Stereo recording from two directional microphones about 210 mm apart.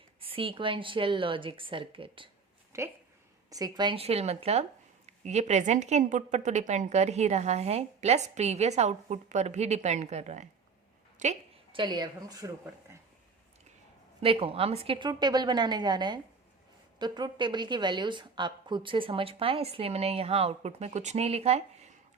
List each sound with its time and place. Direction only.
0.2 s a woman's voice: 25° right (ahead or behind)
2.7 s a woman's voice: 15° right (ahead or behind); by 10.4 s 30° right (ahead or behind)
11.2 s a sound: 35° right (ahead or behind)
11.8 s a woman's voice: 20° right (ahead or behind)
14.2 s a woman's voice: 25° right (ahead or behind)